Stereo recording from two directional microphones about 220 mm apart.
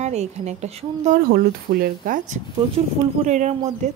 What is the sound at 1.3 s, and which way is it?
Speech, 45° right (ahead or behind).